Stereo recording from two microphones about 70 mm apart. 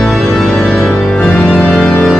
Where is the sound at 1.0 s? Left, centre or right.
Centre.